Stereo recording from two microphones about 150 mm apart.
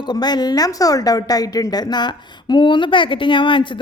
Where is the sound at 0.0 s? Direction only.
30° left (ahead or behind).